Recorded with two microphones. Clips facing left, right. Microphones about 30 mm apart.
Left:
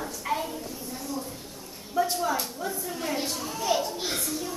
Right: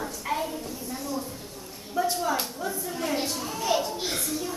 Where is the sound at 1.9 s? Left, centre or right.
Centre.